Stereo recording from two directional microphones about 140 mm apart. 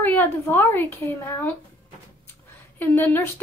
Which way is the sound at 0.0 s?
15° left (ahead or behind).